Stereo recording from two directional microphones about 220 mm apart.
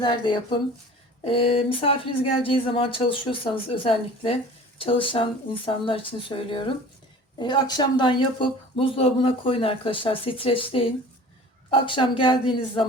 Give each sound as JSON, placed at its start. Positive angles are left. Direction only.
{"t": 0.0, "sound": "speech", "side_deg": 20}